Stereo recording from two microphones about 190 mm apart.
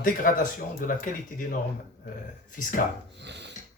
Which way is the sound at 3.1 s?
65° right (ahead or behind).